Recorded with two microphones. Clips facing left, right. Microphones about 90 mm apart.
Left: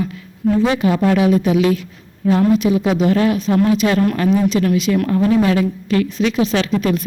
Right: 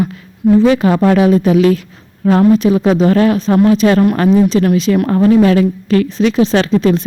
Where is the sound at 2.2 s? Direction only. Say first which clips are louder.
Right 4 dB; 55° right (ahead or behind).